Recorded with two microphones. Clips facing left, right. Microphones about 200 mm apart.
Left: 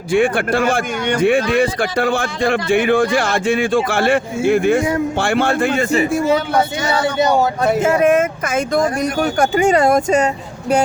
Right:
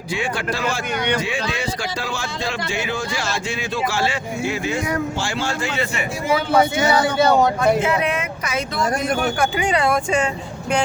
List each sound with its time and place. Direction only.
0.1 s speech: 55° left (ahead or behind)
6.9 s speech: 25° left (ahead or behind)
7.3 s speech: 5° left (ahead or behind)
7.8 s speech: 45° left (ahead or behind)